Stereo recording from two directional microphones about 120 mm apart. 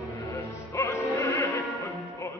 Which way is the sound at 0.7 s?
25° left (ahead or behind).